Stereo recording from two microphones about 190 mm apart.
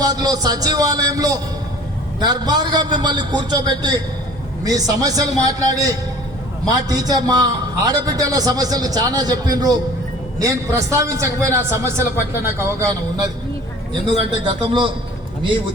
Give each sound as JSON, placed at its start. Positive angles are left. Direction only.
{"t": 0.0, "sound": "a man's voice", "side_deg": -20}